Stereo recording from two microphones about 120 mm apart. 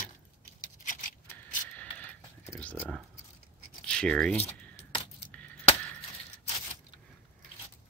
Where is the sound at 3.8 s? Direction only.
10° left (ahead or behind).